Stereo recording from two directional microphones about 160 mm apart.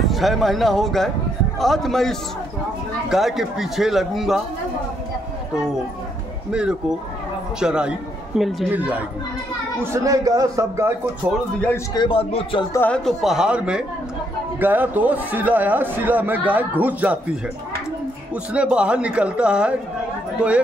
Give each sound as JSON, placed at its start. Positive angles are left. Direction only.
{"t": 0.0, "sound": "a man's voice", "side_deg": 0}
{"t": 6.5, "sound": "a man's voice", "side_deg": -5}
{"t": 11.9, "sound": "speech", "side_deg": 30}
{"t": 12.7, "sound": "a man's voice", "side_deg": 10}
{"t": 18.3, "sound": "a man's voice", "side_deg": -5}